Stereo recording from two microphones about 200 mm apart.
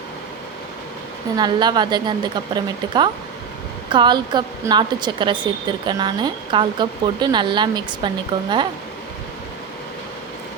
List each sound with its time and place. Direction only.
1.4 s a woman's voice: 20° right (ahead or behind)
3.8 s a woman's voice: 20° right (ahead or behind)